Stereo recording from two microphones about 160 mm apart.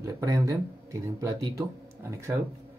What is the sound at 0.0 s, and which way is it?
Speech, 20° right (ahead or behind).